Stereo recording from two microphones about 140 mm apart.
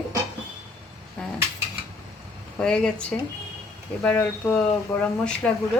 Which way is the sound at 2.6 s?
5° left (ahead or behind).